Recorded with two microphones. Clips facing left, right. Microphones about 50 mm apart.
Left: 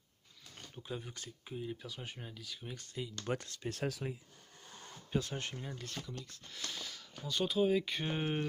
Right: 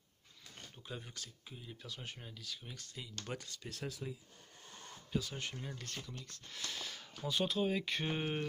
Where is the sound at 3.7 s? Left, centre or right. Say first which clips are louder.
Left 7 dB; left.